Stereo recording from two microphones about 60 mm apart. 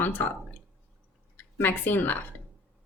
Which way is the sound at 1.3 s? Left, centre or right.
Left.